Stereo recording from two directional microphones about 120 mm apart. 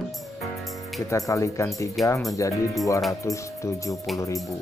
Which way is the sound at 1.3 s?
25° left (ahead or behind).